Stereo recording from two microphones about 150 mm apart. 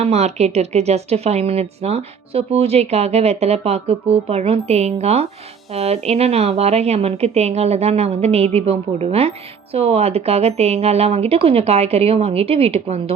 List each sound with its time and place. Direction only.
0.0 s speech: 45° right (ahead or behind)